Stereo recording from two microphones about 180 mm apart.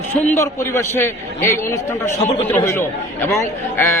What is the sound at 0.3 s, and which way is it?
A man's voice, 15° left (ahead or behind).